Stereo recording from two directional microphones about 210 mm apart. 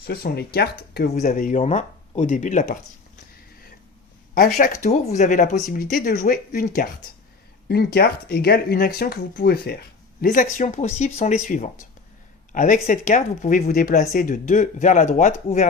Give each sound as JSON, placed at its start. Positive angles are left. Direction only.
{"t": 0.0, "sound": "speech", "side_deg": 50}
{"t": 1.2, "sound": "speech", "side_deg": 40}
{"t": 4.5, "sound": "speech", "side_deg": 40}